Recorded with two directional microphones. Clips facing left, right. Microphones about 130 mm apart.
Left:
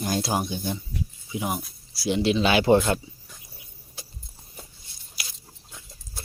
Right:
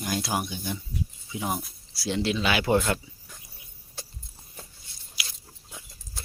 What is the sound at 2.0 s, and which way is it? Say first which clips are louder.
Speech: left 5 dB; 15° left (ahead or behind).